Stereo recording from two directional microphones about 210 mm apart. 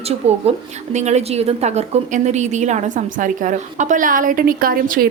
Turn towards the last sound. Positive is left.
turn(degrees=-45)  # may be behind; listen again after turning